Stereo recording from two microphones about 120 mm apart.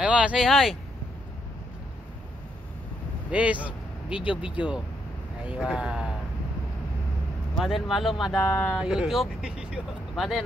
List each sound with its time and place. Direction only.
0.0 s speech: 10° right (ahead or behind)
3.3 s speech: 10° right (ahead or behind)
7.5 s speech: centre (ahead or behind)
8.5 s speech: 20° left (ahead or behind)
8.7 s speech: 5° right (ahead or behind)